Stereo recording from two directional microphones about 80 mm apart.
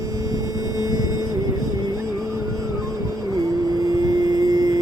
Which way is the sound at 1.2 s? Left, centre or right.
Right.